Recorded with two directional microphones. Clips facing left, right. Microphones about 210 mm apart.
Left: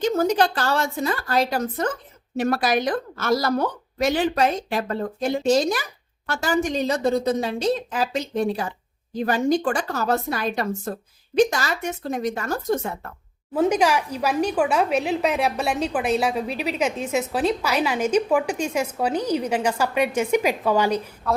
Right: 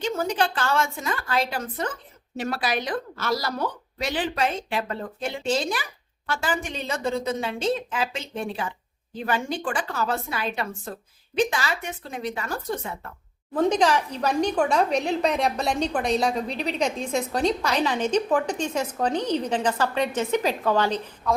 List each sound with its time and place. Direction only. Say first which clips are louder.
0.0 s a woman's voice: left 5 dB; 40° left (ahead or behind)
13.5 s a woman's voice: left 1 dB; 10° left (ahead or behind)